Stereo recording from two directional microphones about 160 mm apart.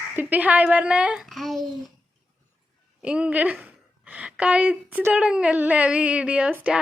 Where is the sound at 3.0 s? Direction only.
5° right (ahead or behind).